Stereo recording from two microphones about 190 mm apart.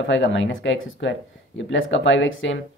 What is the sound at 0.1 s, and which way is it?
Speech, 75° left (ahead or behind).